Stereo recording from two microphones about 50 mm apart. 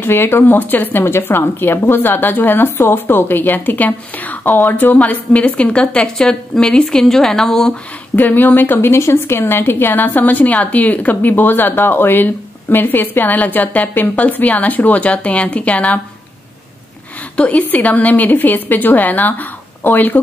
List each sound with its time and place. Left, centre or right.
0.0 s a woman's voice: left
1.0 s a woman's voice: left
6.1 s speech: centre
8.2 s speech: left
17.4 s speech: left